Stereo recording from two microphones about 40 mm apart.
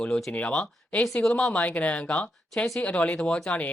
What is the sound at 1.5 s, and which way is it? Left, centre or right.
Speech, left.